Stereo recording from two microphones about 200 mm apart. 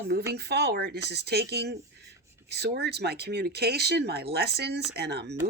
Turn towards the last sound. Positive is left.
turn(degrees=-55)  # may be behind; listen again after turning